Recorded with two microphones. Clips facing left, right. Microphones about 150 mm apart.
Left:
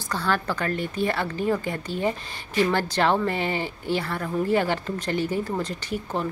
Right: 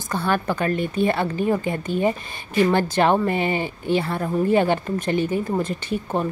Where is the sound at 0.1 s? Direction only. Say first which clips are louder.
Right 3 dB; 20° right (ahead or behind).